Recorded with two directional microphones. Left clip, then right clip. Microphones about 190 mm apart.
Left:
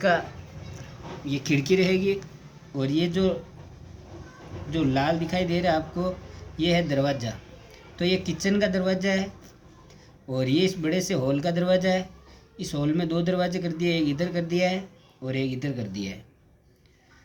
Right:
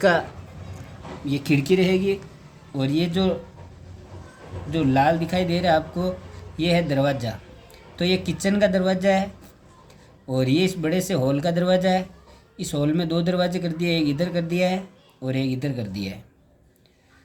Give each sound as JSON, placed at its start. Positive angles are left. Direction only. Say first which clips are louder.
{"t": 1.3, "sound": "speech", "louder": "right 3 dB", "side_deg": -40}
{"t": 4.7, "sound": "speech", "louder": "right 5 dB", "side_deg": -45}